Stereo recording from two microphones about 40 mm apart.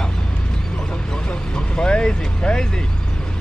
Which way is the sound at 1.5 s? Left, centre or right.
Left.